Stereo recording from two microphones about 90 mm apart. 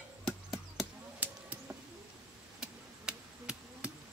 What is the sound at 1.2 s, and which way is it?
Arrow, 20° right (ahead or behind).